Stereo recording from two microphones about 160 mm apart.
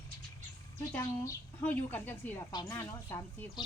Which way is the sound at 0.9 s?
10° left (ahead or behind).